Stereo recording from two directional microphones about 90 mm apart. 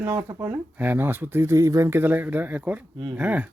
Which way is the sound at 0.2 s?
40° right (ahead or behind).